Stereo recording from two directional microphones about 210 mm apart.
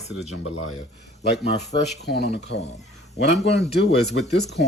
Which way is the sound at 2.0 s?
50° left (ahead or behind).